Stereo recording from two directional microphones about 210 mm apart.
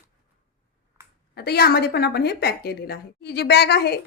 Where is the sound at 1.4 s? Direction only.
50° left (ahead or behind).